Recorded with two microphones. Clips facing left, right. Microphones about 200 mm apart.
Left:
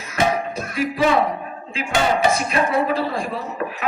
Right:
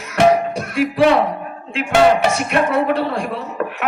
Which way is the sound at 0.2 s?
70° right (ahead or behind).